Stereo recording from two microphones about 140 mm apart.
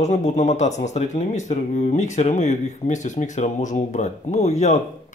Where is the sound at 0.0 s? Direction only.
55° left (ahead or behind).